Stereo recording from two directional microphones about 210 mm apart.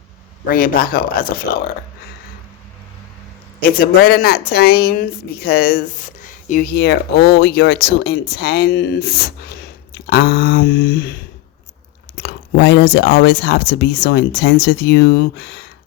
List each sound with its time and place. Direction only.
0.4 s a woman's voice: 45° left (ahead or behind)
3.8 s a woman's voice: 45° left (ahead or behind)